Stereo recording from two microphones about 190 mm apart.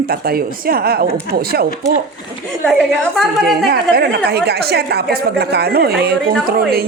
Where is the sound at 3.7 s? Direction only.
55° right (ahead or behind).